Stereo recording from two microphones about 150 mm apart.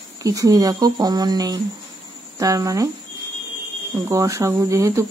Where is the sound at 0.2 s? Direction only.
20° right (ahead or behind).